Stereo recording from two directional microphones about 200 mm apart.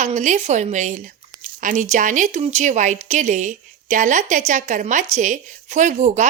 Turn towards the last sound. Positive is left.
turn(degrees=-35)  # may be behind; listen again after turning